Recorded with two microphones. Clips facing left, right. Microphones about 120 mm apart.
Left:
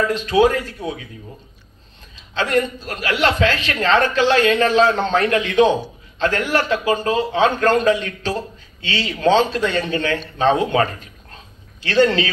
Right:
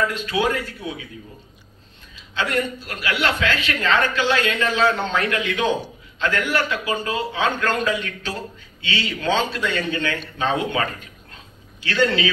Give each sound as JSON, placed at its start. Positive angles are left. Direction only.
{"t": 0.3, "sound": "a man's voice", "side_deg": 35}
{"t": 2.3, "sound": "a man's voice", "side_deg": 40}